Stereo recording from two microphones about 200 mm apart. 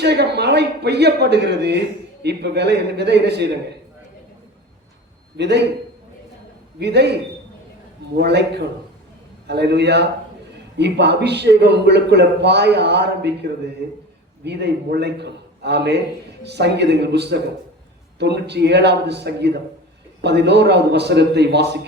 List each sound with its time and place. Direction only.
0.0 s a man's voice: 55° right (ahead or behind)
6.7 s a man's voice: 55° right (ahead or behind)